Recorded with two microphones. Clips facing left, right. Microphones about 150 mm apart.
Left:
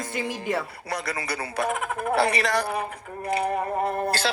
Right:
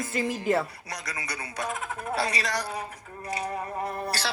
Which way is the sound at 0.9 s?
60° left (ahead or behind).